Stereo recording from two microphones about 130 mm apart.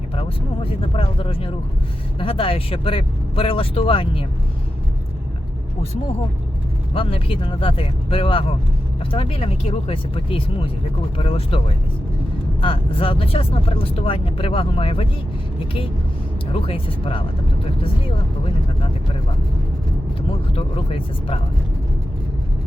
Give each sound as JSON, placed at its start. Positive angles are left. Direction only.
{"t": 0.2, "sound": "speech", "side_deg": 45}
{"t": 6.9, "sound": "speech", "side_deg": 45}
{"t": 12.6, "sound": "speech", "side_deg": 45}
{"t": 16.5, "sound": "speech", "side_deg": 45}
{"t": 18.0, "sound": "vehicle", "side_deg": 45}
{"t": 20.6, "sound": "speech", "side_deg": 45}